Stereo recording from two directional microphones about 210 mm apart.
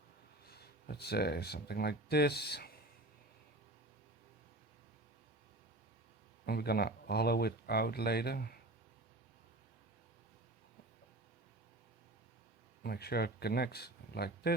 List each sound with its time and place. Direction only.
0.4 s speech: 50° left (ahead or behind)
6.4 s speech: 50° left (ahead or behind)
12.8 s speech: 50° left (ahead or behind)